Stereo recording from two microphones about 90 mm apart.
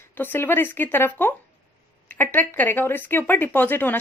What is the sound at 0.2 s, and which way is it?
Speech, 25° left (ahead or behind).